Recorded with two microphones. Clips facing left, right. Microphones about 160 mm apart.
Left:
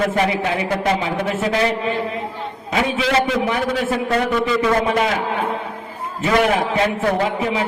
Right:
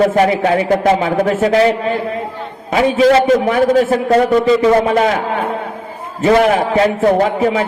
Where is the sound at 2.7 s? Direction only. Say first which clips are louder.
Right 8 dB; 45° right (ahead or behind).